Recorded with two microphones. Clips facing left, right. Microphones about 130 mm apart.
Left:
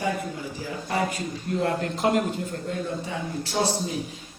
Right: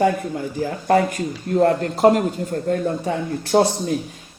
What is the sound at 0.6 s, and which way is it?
A man's voice, 55° right (ahead or behind).